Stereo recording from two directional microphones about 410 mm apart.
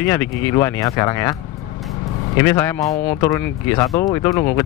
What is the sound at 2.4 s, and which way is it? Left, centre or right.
Speech, centre.